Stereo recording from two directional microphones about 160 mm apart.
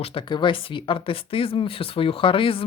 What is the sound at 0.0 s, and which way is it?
Speech, 35° left (ahead or behind).